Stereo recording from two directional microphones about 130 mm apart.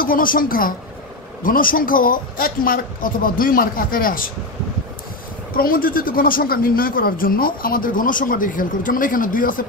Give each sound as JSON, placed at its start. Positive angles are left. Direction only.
{"t": 0.0, "sound": "speech", "side_deg": 90}
{"t": 5.5, "sound": "speech", "side_deg": 90}